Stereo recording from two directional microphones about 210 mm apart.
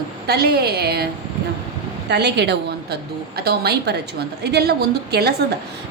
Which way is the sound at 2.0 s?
55° right (ahead or behind).